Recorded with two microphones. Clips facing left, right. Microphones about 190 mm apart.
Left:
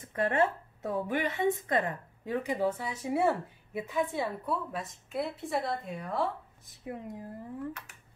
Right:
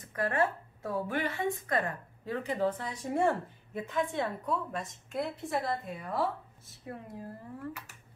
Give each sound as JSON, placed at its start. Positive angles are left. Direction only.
{"t": 0.1, "sound": "a woman's voice", "side_deg": 25}
{"t": 6.6, "sound": "a woman's voice", "side_deg": 15}